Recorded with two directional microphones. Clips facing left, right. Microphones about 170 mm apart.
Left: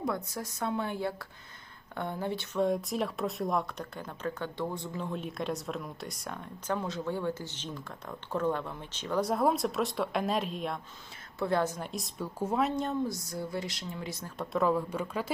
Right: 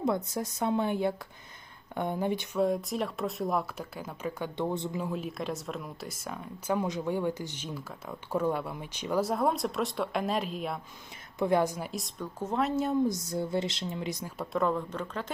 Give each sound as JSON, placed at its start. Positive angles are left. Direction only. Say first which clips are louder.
{"t": 0.0, "sound": "speech", "louder": "right 4 dB", "side_deg": -20}
{"t": 2.6, "sound": "speech", "louder": "even", "side_deg": 0}
{"t": 4.9, "sound": "speech", "louder": "right 2 dB", "side_deg": -5}
{"t": 9.2, "sound": "speech", "louder": "left 4 dB", "side_deg": 0}
{"t": 11.3, "sound": "speech", "louder": "right 3 dB", "side_deg": -15}
{"t": 13.1, "sound": "speech", "louder": "right 5 dB", "side_deg": -20}
{"t": 14.5, "sound": "speech", "louder": "left 1 dB", "side_deg": 5}